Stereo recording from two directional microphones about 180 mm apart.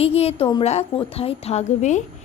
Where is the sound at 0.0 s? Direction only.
35° left (ahead or behind).